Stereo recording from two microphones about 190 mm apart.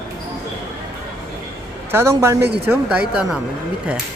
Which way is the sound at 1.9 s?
15° right (ahead or behind).